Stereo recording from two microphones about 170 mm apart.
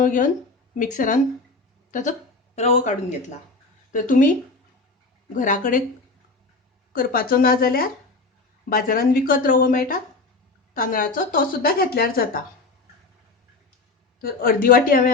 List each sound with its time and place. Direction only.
0.0 s a woman's voice: 50° left (ahead or behind)
5.3 s speech: 50° left (ahead or behind)
6.9 s speech: 60° left (ahead or behind)
14.2 s speech: 60° left (ahead or behind)